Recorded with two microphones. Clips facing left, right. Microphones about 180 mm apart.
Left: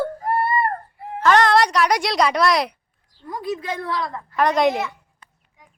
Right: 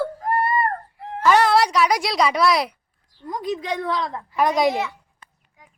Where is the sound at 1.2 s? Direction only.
10° right (ahead or behind).